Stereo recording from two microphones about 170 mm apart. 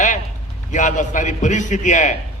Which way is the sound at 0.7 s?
45° left (ahead or behind).